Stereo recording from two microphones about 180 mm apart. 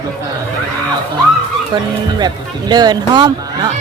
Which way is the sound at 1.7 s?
25° right (ahead or behind).